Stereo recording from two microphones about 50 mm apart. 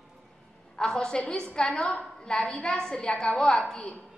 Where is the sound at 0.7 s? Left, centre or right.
Centre.